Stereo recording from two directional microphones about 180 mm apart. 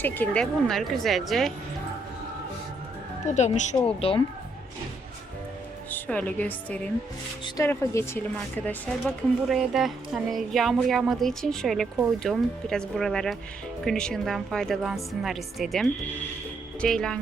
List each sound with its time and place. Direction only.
0.0 s speech: 10° left (ahead or behind)
3.2 s speech: 40° left (ahead or behind)
5.9 s a woman's voice: 10° left (ahead or behind)